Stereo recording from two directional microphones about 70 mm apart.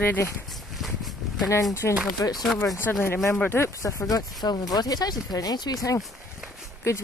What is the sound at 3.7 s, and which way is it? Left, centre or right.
Speech, left.